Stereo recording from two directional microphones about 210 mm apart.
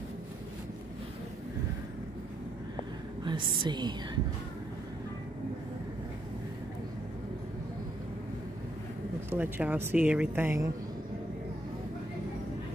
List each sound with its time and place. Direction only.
3.3 s a woman's voice: 20° right (ahead or behind)
9.3 s speech: 10° right (ahead or behind)